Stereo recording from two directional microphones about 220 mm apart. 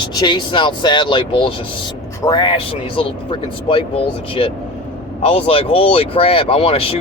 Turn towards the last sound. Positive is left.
turn(degrees=25)  # may be behind; listen again after turning